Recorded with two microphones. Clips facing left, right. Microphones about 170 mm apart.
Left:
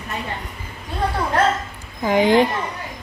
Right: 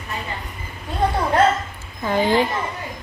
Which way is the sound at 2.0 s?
15° left (ahead or behind).